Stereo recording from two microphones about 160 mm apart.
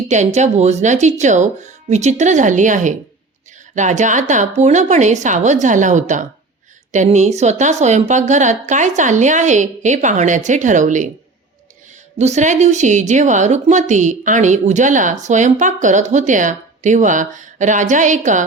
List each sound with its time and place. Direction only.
0.1 s a woman's voice: 45° right (ahead or behind)
12.2 s a woman's voice: 45° right (ahead or behind)